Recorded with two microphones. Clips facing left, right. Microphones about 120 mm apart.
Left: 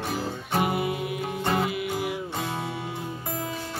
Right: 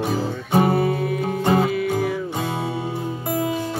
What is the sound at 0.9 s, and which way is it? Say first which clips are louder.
Music: right 7 dB; 15° left (ahead or behind).